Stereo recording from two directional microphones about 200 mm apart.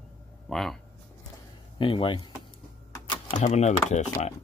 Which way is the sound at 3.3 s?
35° left (ahead or behind).